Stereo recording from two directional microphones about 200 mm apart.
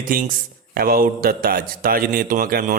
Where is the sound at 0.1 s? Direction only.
45° right (ahead or behind).